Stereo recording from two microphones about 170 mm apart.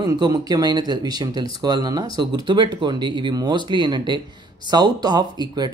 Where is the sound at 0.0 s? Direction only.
25° right (ahead or behind).